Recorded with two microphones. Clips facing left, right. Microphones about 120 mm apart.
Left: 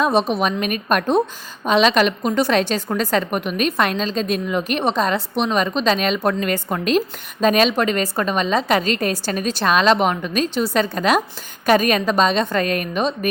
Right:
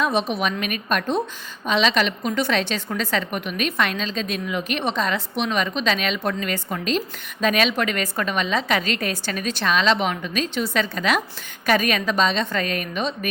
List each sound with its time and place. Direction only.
0.0 s a woman's voice: 35° left (ahead or behind)
7.4 s a woman's voice: 40° left (ahead or behind)